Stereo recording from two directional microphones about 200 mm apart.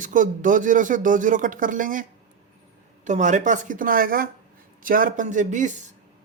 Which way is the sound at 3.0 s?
35° right (ahead or behind).